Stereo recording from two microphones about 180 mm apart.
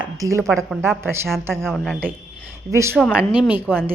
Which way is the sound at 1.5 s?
5° left (ahead or behind).